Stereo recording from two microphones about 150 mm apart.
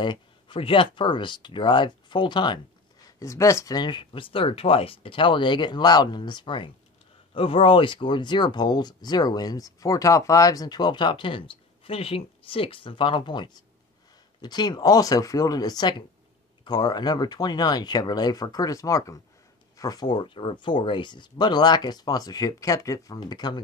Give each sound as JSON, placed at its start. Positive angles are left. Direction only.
{"t": 0.0, "sound": "speech", "side_deg": 35}
{"t": 3.2, "sound": "speech", "side_deg": 20}